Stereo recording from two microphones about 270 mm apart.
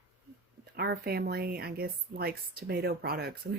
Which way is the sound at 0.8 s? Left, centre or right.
Right.